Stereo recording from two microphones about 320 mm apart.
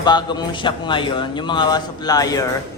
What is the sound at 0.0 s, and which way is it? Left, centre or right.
A man's voice, centre.